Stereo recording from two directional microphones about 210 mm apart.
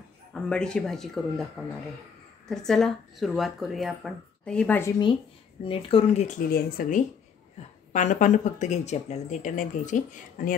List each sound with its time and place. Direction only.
0.3 s speech: 5° left (ahead or behind)
5.7 s speech: 25° left (ahead or behind)
6.5 s speech: 45° left (ahead or behind)